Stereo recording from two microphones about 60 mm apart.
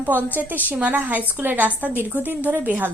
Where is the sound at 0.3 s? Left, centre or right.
Right.